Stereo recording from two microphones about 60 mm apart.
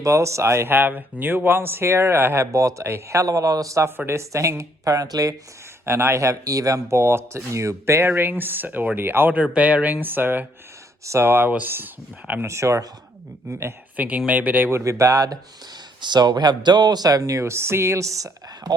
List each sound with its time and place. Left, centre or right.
0.0 s speech: right
2.4 s speech: right
3.2 s a man's voice: right
3.8 s speech: right
5.8 s speech: right
6.4 s speech: right
6.9 s speech: right
9.4 s speech: right
11.0 s speech: right
11.3 s speech: right
12.5 s speech: right
13.9 s speech: right
14.8 s a man's voice: right
16.9 s speech: right